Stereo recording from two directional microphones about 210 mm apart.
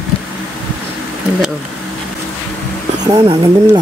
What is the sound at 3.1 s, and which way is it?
Speech, 15° right (ahead or behind).